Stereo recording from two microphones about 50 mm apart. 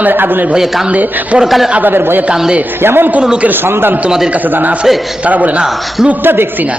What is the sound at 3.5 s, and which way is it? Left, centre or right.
Speech, right.